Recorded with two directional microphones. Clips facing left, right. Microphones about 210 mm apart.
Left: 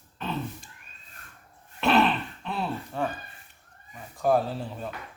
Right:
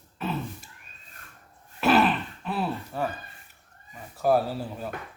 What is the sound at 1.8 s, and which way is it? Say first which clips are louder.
Grunt: right 1 dB; 5° right (ahead or behind).